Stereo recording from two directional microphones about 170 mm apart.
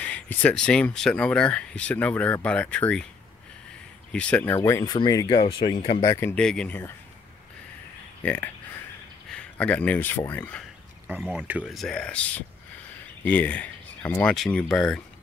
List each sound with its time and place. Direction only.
0.0 s speech: 10° left (ahead or behind)
4.1 s speech: 5° left (ahead or behind); by 6.0 s 35° left (ahead or behind)
6.0 s speech: 15° left (ahead or behind)
8.2 s speech: 10° left (ahead or behind)
11.1 s speech: 5° right (ahead or behind)